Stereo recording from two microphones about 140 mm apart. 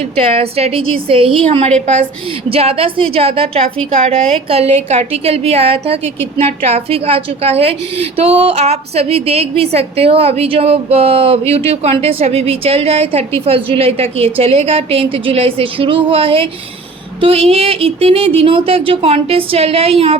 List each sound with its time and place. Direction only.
0.2 s a woman's voice: 45° right (ahead or behind)